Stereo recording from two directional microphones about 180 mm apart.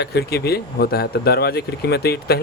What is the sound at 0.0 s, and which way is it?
Speech, 65° left (ahead or behind).